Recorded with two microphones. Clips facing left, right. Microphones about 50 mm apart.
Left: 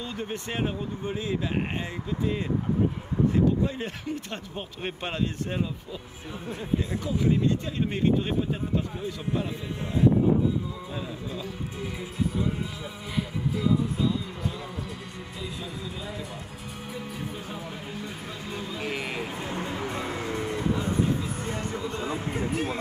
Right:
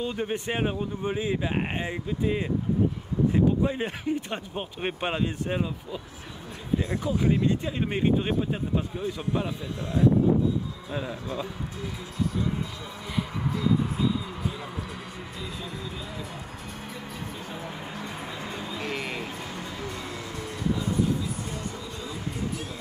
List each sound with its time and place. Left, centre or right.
0.0 s speech: right
3.6 s speech: centre
7.0 s speech: centre
10.9 s speech: centre
18.7 s music: centre
19.3 s music: left
21.5 s speech: left